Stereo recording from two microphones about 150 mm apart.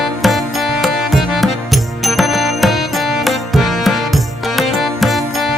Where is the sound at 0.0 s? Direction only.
Centre (ahead or behind).